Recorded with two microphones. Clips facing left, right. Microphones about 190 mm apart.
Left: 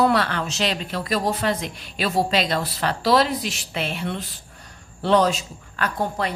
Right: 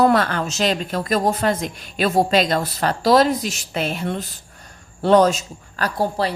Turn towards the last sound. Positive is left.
turn(degrees=-35)  # may be behind; listen again after turning